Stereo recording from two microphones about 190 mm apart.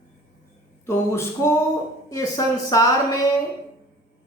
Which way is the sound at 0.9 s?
15° left (ahead or behind).